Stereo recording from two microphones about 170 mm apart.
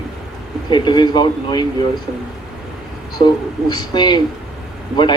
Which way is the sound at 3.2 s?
25° left (ahead or behind).